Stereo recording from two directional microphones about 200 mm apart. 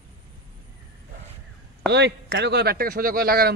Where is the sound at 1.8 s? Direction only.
60° right (ahead or behind).